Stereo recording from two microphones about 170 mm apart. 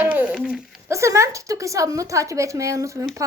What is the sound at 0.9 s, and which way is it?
Speech, 15° right (ahead or behind).